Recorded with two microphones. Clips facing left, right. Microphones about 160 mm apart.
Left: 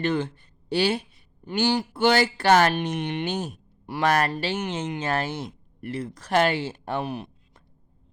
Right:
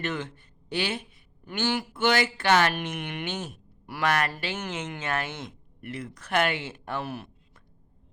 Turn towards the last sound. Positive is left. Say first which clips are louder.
# left 4 dB
turn(degrees=20)  # may be behind; listen again after turning